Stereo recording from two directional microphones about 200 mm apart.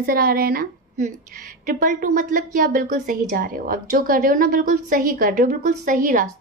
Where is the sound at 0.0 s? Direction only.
45° right (ahead or behind).